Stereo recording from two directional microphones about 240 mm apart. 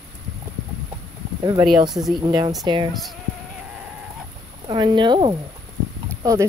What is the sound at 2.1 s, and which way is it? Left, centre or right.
Speech, centre.